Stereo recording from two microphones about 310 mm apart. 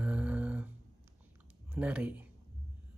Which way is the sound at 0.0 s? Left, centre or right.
Centre.